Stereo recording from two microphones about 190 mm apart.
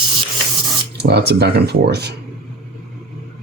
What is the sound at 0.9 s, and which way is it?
Speech, 60° right (ahead or behind).